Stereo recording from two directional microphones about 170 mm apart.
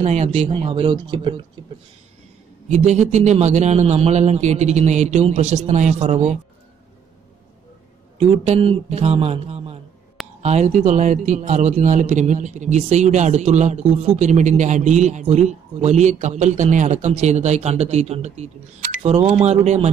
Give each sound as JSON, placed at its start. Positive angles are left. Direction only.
{"t": 0.0, "sound": "a man's voice", "side_deg": -35}
{"t": 2.7, "sound": "a man's voice", "side_deg": -40}
{"t": 8.2, "sound": "a man's voice", "side_deg": -35}